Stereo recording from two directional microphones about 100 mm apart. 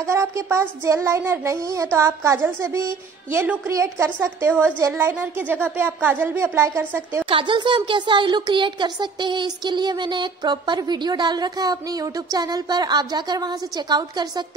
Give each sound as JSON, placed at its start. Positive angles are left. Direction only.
{"t": 0.0, "sound": "speech", "side_deg": -30}
{"t": 7.2, "sound": "a woman's voice", "side_deg": -55}